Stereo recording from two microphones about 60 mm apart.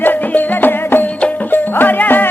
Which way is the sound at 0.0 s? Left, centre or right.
Left.